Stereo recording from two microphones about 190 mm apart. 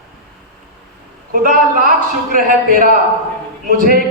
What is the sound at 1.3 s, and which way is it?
A man's voice, 50° right (ahead or behind).